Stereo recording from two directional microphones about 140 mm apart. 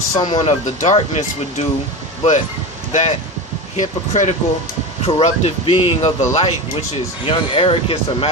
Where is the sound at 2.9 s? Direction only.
55° left (ahead or behind).